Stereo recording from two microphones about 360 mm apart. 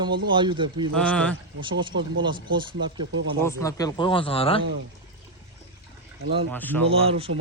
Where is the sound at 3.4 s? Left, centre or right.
Centre.